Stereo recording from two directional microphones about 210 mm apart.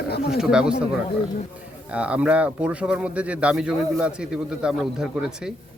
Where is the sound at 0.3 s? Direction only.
5° right (ahead or behind).